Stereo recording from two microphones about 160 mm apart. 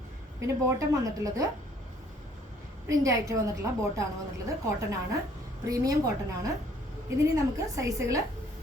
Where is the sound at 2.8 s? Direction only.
20° right (ahead or behind).